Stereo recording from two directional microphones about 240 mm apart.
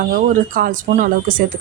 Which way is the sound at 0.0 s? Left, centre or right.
Right.